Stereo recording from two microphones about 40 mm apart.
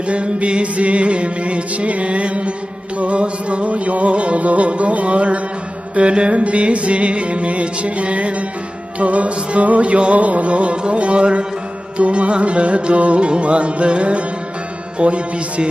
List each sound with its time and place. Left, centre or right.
0.1 s music: right